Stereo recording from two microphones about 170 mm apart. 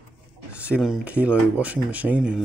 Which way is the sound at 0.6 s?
5° right (ahead or behind).